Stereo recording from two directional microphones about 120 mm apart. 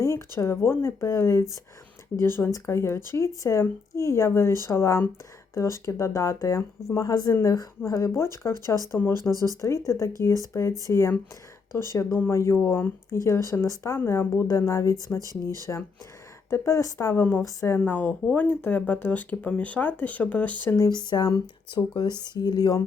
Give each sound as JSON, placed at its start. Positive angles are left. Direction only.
{"t": 0.3, "sound": "speech", "side_deg": 20}
{"t": 17.7, "sound": "speech", "side_deg": 15}
{"t": 20.7, "sound": "speech", "side_deg": 30}